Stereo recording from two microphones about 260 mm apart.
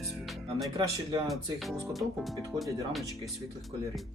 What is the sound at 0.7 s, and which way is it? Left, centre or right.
Speech, centre.